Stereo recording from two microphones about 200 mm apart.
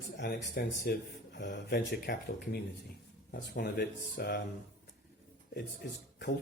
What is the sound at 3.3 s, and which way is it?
Speech, 50° left (ahead or behind).